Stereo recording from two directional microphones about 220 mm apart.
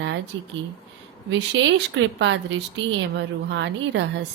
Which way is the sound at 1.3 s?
55° right (ahead or behind).